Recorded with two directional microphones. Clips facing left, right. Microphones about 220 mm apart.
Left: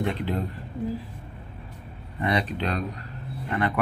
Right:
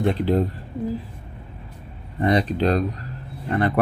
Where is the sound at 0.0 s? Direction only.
40° right (ahead or behind).